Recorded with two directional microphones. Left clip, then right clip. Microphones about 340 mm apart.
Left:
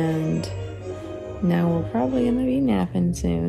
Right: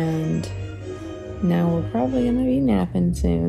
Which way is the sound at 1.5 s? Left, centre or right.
Centre.